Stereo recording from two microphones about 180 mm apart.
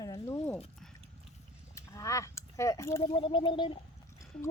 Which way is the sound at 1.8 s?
15° left (ahead or behind).